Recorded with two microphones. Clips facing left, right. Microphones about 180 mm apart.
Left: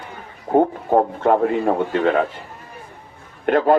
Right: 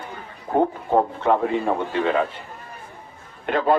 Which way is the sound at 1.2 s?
45° left (ahead or behind).